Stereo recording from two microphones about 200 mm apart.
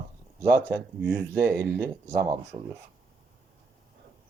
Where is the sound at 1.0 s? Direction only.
15° right (ahead or behind).